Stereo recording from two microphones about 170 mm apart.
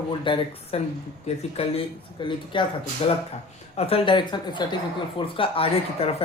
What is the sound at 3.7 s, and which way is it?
Speech, 35° left (ahead or behind).